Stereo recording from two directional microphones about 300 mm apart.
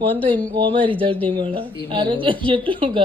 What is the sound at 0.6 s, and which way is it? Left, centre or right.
A woman's voice, centre.